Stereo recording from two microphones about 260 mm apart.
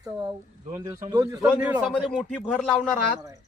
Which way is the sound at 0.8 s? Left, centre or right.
Centre.